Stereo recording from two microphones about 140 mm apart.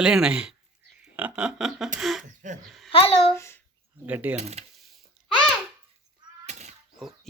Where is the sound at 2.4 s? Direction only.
60° right (ahead or behind).